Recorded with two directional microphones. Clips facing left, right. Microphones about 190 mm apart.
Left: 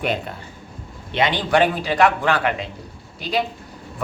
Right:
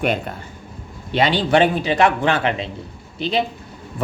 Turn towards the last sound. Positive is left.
turn(degrees=-25)  # may be behind; listen again after turning